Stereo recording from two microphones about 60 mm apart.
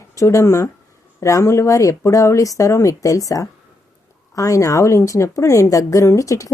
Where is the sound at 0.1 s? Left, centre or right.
Left.